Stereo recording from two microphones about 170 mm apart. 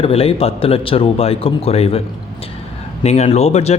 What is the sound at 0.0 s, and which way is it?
Speech, 35° left (ahead or behind).